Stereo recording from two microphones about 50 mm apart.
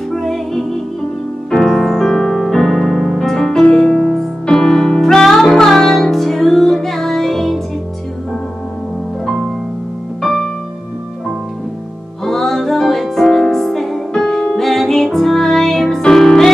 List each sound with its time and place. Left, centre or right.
0.1 s music: centre
1.5 s piano: centre
3.6 s music: centre
10.2 s music: centre
12.3 s music: centre